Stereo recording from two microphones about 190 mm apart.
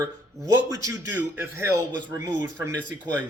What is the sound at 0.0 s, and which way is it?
A man's voice, 15° right (ahead or behind).